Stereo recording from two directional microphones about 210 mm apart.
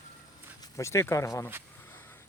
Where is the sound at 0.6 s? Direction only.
15° left (ahead or behind).